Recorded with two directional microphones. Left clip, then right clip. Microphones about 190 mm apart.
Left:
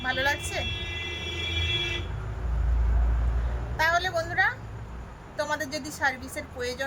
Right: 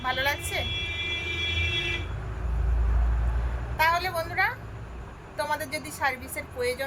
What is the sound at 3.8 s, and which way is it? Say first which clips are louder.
Speech: even; 15° left (ahead or behind).